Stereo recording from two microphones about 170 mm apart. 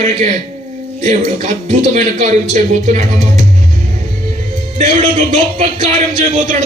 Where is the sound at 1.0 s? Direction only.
45° right (ahead or behind).